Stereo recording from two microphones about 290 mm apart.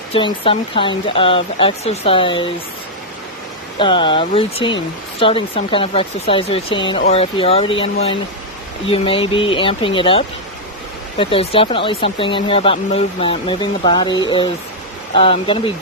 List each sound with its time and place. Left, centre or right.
0.1 s speech: centre
3.8 s speech: centre